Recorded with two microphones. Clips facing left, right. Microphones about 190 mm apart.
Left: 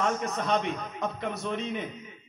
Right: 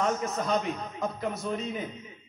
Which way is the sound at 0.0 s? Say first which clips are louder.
Even; centre (ahead or behind).